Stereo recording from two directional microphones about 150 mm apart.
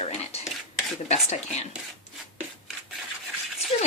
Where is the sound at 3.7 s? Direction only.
45° left (ahead or behind).